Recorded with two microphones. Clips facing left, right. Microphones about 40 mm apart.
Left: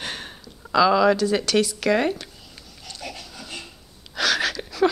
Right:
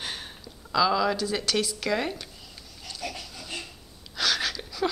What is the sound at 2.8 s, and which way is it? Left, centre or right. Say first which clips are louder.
Pig: even; centre.